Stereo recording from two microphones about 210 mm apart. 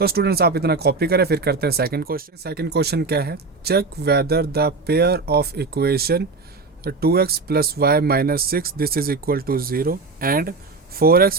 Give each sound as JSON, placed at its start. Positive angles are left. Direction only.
{"t": 0.0, "sound": "speech", "side_deg": -45}